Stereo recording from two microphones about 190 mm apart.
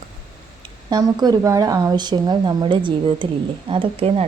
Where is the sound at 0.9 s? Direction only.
20° right (ahead or behind).